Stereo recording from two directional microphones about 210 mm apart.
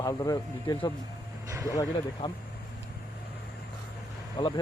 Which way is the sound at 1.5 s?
15° right (ahead or behind).